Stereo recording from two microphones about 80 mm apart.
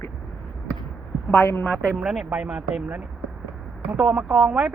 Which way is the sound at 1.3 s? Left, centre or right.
Left.